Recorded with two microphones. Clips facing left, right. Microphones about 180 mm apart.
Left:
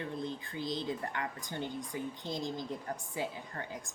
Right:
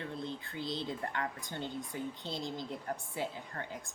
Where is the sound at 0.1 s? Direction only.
15° left (ahead or behind).